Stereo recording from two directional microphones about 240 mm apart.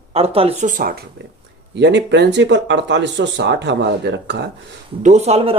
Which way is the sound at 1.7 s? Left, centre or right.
Right.